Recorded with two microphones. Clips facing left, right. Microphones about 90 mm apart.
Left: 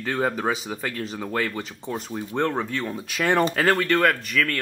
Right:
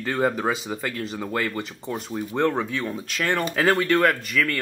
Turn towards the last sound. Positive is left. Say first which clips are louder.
# even
turn(degrees=-5)  # may be behind; listen again after turning